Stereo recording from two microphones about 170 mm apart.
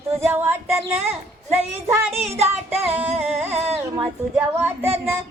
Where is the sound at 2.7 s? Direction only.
10° right (ahead or behind).